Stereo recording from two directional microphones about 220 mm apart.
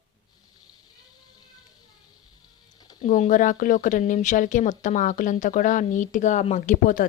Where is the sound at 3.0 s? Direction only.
35° left (ahead or behind).